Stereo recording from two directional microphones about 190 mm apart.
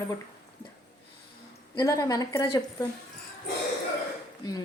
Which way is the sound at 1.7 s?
15° left (ahead or behind).